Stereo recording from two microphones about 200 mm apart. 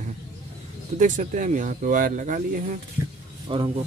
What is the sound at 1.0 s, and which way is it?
Speech, 40° right (ahead or behind).